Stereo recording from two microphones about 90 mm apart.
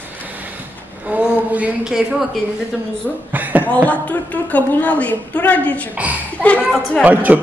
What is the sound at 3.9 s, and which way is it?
A woman's voice, 15° left (ahead or behind).